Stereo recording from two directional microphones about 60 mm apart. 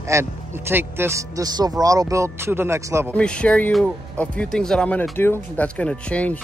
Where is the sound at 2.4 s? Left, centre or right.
Right.